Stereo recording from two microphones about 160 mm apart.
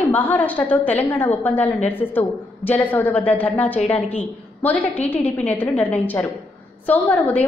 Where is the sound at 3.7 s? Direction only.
40° left (ahead or behind).